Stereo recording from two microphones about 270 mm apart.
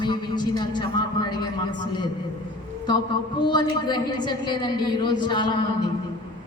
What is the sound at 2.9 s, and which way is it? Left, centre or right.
A man's voice, centre.